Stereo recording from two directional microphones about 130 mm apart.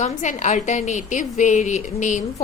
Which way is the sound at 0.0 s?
70° left (ahead or behind).